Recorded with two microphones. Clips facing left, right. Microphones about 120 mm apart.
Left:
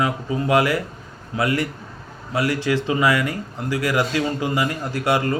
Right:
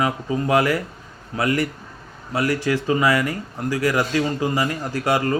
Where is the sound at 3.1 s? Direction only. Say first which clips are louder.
Even; 35° right (ahead or behind).